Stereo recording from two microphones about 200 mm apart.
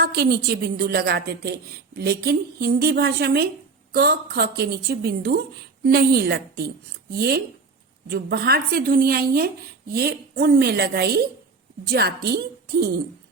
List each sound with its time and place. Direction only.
0.0 s a woman's voice: 50° right (ahead or behind)